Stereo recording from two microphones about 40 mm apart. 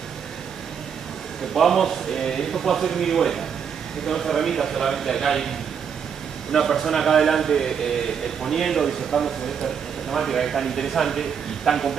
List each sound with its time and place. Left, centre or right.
1.5 s speech: centre
6.5 s a man's voice: centre